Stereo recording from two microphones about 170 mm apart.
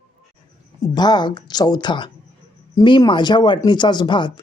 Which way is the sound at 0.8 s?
25° left (ahead or behind).